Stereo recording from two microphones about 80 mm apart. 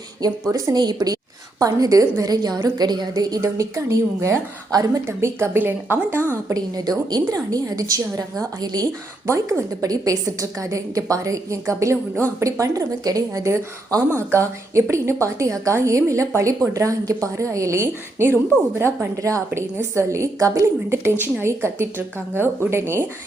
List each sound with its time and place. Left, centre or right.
0.5 s a woman's voice: right
0.8 s a woman's voice: right
5.0 s a woman's voice: right
6.5 s a woman's voice: right
9.2 s a woman's voice: right
14.2 s a woman's voice: right
19.1 s a woman's voice: right
19.5 s a woman's voice: right